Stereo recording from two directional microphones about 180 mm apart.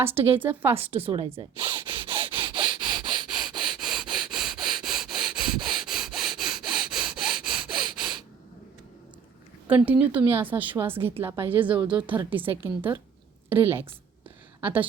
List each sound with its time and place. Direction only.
0.0 s a woman's voice: 10° right (ahead or behind)
0.8 s a woman's voice: 30° right (ahead or behind)
1.4 s rub: 25° right (ahead or behind)
3.2 s sniff: centre (ahead or behind)
9.6 s a woman's voice: 10° right (ahead or behind)